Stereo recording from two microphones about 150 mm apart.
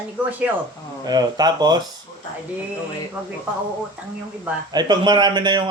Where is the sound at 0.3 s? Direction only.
10° right (ahead or behind).